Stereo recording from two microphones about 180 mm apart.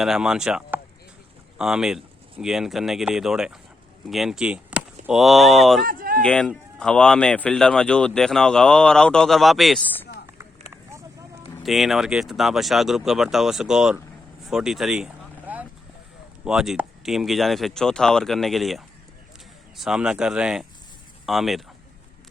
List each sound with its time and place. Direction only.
0.0 s speech: 5° right (ahead or behind)
5.8 s a sound: 50° right (ahead or behind)
6.2 s speech: 5° left (ahead or behind)
11.6 s speech: centre (ahead or behind)
14.4 s vehicle: 5° right (ahead or behind)
16.4 s speech: 5° right (ahead or behind)